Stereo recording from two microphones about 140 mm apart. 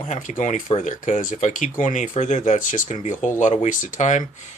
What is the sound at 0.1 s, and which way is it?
Speech, 65° left (ahead or behind).